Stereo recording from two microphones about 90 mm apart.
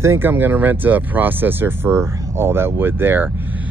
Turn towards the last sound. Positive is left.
turn(degrees=-25)  # may be behind; listen again after turning